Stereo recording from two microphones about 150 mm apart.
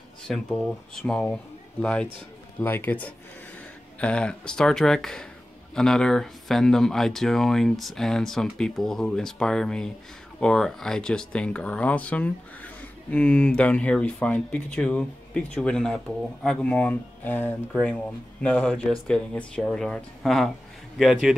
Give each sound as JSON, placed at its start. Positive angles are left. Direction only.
{"t": 0.3, "sound": "speech", "side_deg": 5}